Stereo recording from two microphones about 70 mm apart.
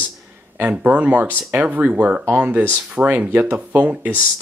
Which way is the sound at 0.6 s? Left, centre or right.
Right.